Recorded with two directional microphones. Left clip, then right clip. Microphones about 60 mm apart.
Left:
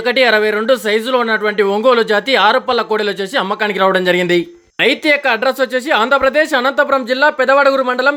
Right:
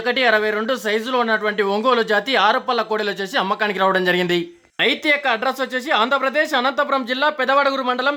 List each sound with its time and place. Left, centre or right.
0.0 s speech: left
7.2 s a man's voice: left